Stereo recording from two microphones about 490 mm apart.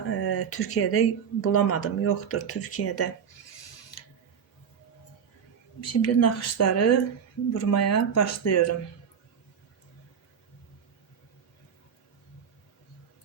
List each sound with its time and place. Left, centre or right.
0.1 s speech: left
5.8 s speech: left